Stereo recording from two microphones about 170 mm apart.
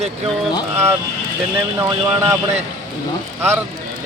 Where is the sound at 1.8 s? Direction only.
15° right (ahead or behind).